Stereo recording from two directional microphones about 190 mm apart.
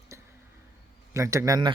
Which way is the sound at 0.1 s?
15° right (ahead or behind).